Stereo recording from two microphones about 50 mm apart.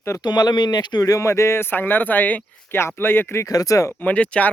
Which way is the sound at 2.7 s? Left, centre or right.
Left.